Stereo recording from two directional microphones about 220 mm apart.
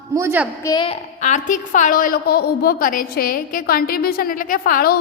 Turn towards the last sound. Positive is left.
turn(degrees=40)  # may be behind; listen again after turning